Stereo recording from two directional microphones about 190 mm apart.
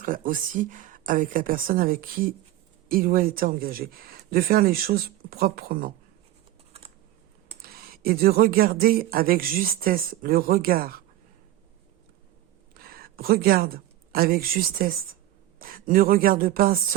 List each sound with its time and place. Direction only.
0.0 s speech: 45° right (ahead or behind)
7.6 s speech: 55° right (ahead or behind)
12.7 s a woman's voice: 50° right (ahead or behind)